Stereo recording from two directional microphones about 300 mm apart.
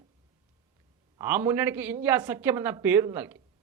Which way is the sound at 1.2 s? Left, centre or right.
Centre.